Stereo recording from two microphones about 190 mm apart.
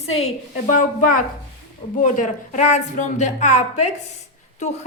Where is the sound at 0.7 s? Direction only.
45° left (ahead or behind).